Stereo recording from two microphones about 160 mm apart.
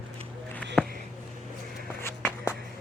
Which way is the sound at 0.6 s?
5° left (ahead or behind).